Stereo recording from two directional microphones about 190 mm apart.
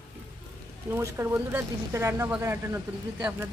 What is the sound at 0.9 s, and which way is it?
Speech, 10° right (ahead or behind).